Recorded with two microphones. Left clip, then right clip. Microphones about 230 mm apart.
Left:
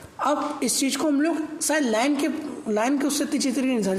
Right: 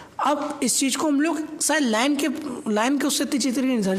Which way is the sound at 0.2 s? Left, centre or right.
Right.